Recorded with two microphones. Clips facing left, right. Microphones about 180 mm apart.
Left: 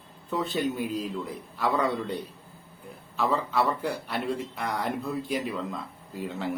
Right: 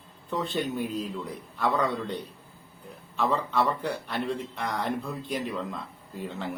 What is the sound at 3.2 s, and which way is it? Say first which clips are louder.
A man's voice: even; centre (ahead or behind).